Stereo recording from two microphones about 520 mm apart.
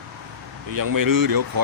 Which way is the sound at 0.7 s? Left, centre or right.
Right.